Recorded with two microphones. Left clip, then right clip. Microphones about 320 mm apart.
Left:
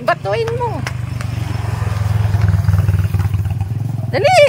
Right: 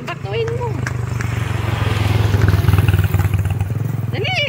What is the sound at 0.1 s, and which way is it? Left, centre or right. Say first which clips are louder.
Speech: left 6 dB; centre.